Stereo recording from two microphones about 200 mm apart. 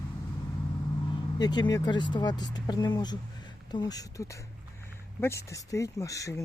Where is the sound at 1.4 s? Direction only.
20° left (ahead or behind).